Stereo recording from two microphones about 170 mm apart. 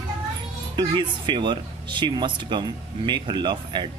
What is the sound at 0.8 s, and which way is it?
Speech, 25° right (ahead or behind).